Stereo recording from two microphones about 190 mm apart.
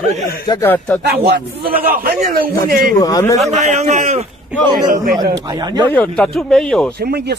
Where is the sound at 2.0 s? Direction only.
50° right (ahead or behind).